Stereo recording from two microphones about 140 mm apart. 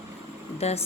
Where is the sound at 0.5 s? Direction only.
45° left (ahead or behind).